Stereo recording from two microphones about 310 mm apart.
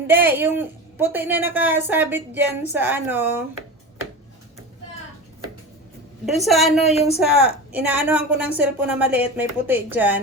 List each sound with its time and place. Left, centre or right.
0.1 s speech: centre
6.2 s a woman's voice: centre
6.8 s speech: centre
7.7 s a woman's voice: centre